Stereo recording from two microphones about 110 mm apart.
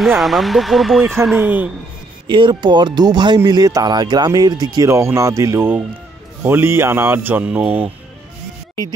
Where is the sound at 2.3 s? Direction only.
45° right (ahead or behind); by 7.9 s 15° right (ahead or behind).